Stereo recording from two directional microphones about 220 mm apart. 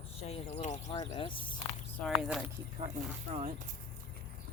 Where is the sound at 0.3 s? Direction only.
30° left (ahead or behind).